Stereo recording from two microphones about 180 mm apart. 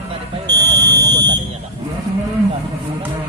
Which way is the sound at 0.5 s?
25° right (ahead or behind).